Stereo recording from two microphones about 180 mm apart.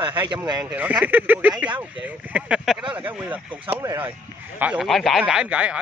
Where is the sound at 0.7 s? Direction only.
10° right (ahead or behind).